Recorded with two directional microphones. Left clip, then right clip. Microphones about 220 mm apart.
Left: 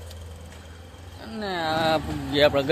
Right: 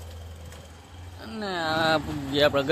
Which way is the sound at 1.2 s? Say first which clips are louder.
Left 1 dB; centre (ahead or behind).